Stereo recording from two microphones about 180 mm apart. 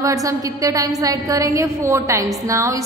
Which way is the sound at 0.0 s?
20° right (ahead or behind).